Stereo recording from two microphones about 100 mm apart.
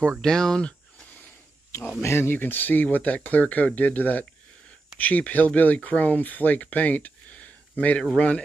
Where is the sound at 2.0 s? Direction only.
25° left (ahead or behind).